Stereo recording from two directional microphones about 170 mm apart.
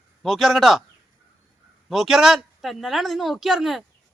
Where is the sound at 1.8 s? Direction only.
Centre (ahead or behind).